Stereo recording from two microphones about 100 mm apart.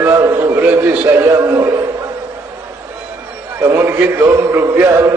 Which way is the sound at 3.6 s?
25° right (ahead or behind).